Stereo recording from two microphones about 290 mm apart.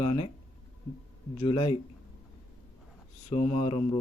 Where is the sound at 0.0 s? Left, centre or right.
Centre.